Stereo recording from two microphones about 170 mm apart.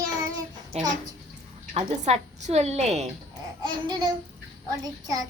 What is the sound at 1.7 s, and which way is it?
A woman's voice, 40° right (ahead or behind).